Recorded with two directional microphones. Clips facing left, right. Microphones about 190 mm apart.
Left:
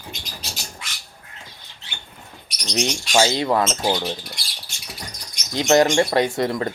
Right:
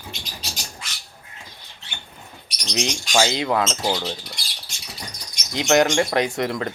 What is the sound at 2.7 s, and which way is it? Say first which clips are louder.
Speech: left 2 dB; centre (ahead or behind).